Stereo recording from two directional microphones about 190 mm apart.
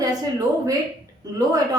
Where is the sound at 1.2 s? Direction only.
20° right (ahead or behind).